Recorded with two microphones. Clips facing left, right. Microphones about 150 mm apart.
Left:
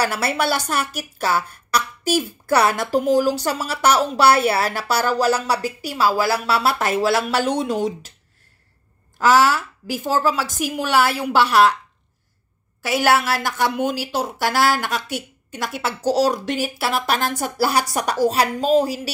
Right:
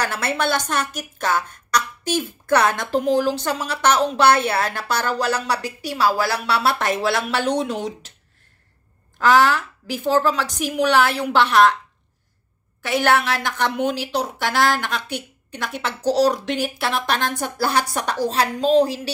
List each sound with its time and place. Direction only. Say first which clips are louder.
0.0 s a woman's voice: left 2 dB; 10° left (ahead or behind)
9.2 s a woman's voice: even; 5° left (ahead or behind)
9.6 s speech: left 1 dB; 45° left (ahead or behind)
10.0 s a woman's voice: right 2 dB; 5° left (ahead or behind)
12.8 s a woman's voice: left 1 dB; 5° left (ahead or behind)